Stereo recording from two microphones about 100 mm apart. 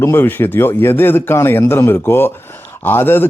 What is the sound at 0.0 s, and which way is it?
A man's voice, 25° left (ahead or behind).